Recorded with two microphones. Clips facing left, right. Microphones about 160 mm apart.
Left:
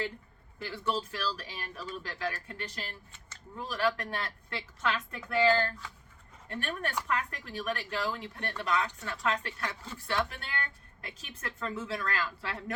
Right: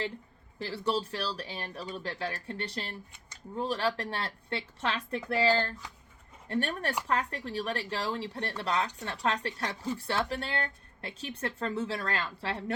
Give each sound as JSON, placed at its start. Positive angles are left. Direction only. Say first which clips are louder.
{"t": 0.6, "sound": "speech", "louder": "right 2 dB", "side_deg": -30}